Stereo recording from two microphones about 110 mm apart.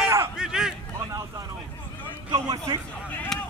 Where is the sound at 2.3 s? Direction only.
40° right (ahead or behind).